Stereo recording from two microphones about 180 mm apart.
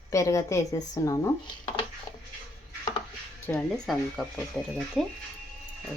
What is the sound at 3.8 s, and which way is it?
Speech, centre (ahead or behind).